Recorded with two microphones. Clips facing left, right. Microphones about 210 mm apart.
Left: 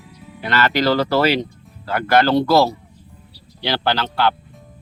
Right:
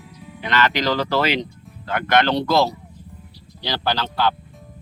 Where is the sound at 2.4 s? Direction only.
5° left (ahead or behind).